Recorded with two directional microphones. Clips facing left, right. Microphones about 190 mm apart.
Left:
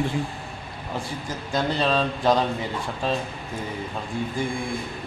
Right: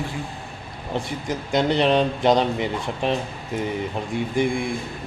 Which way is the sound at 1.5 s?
20° right (ahead or behind).